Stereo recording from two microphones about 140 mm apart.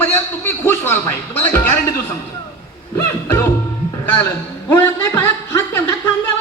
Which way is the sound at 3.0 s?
20° left (ahead or behind).